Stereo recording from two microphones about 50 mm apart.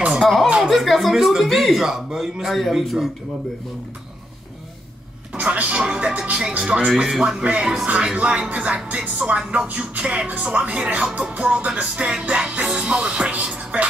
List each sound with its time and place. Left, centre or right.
0.2 s a sound: centre
0.6 s speech: centre
5.3 s music: right
7.1 s speech: centre
7.8 s music: right